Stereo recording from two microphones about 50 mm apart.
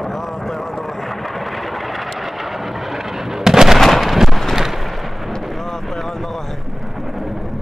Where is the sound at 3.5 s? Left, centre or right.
Centre.